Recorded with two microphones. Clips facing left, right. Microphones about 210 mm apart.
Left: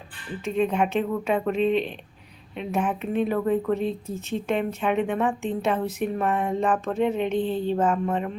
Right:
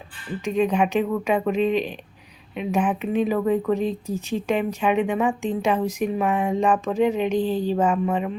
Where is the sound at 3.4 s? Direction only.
90° right.